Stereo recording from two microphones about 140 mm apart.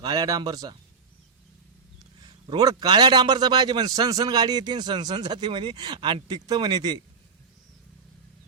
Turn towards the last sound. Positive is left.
turn(degrees=-30)  # may be behind; listen again after turning